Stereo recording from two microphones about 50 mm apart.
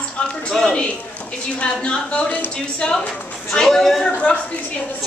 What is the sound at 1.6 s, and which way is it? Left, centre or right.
Speech, left.